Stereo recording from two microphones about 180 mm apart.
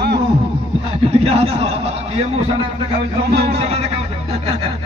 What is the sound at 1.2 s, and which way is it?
A man's voice, 35° right (ahead or behind).